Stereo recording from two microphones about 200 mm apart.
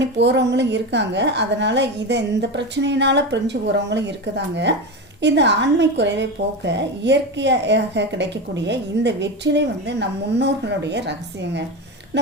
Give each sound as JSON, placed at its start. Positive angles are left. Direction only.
{"t": 0.0, "sound": "a woman's voice", "side_deg": -60}